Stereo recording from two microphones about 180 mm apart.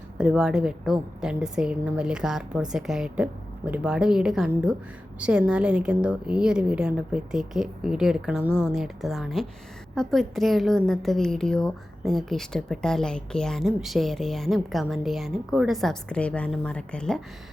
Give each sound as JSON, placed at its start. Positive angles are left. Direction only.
{"t": 0.2, "sound": "a woman's voice", "side_deg": -5}